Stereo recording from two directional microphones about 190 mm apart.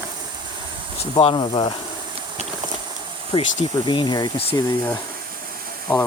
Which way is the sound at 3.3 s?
25° left (ahead or behind).